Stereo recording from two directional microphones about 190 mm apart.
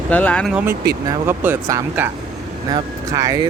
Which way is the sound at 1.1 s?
10° right (ahead or behind).